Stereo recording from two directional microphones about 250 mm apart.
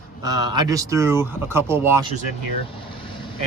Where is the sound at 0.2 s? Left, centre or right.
Centre.